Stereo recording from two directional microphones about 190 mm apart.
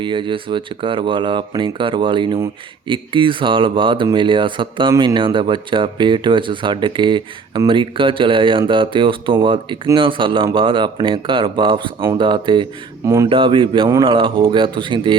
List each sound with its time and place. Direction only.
0.0 s speech: 25° right (ahead or behind)